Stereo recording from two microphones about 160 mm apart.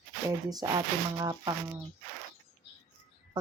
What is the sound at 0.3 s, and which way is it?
Speech, 25° right (ahead or behind).